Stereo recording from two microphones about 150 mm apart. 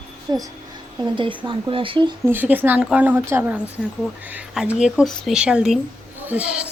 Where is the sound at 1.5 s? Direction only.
35° right (ahead or behind).